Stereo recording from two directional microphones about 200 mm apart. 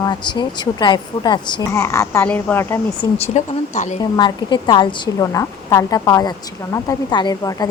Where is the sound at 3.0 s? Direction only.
30° left (ahead or behind).